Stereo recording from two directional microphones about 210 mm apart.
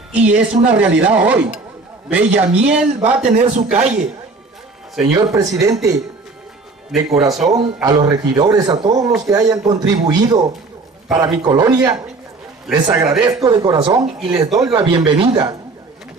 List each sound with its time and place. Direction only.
0.1 s a man's voice: 5° right (ahead or behind)
3.3 s a man's voice: 35° right (ahead or behind)
5.0 s a man's voice: 15° right (ahead or behind)
7.5 s a man's voice: 20° right (ahead or behind)